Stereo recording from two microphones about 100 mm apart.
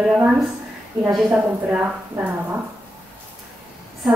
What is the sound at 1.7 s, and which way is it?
Speech, 20° right (ahead or behind).